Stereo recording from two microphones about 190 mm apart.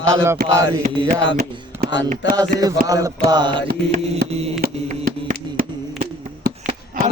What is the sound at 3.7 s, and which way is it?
Mantra, 55° right (ahead or behind).